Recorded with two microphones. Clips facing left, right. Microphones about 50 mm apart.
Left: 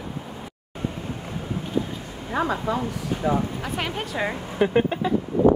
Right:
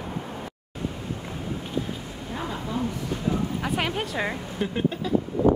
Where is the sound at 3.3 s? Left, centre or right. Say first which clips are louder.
Left 5 dB; left.